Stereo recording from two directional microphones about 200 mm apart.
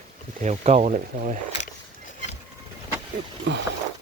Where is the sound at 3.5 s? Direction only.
60° right (ahead or behind).